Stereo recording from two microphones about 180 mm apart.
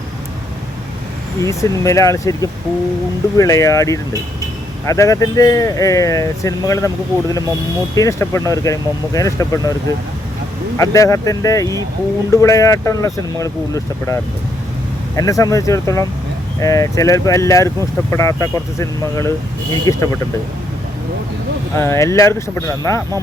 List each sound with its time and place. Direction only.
1.4 s speech: 15° left (ahead or behind)
7.9 s speech: 15° left (ahead or behind)
10.8 s speech: 20° left (ahead or behind)
21.8 s speech: 15° left (ahead or behind)